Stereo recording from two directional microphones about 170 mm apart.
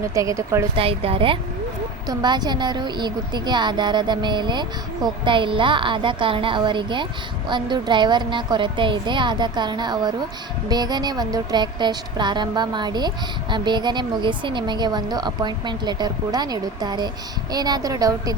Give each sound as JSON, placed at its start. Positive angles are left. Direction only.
{"t": 0.0, "sound": "a woman's voice", "side_deg": -20}
{"t": 0.8, "sound": "a woman's voice", "side_deg": -35}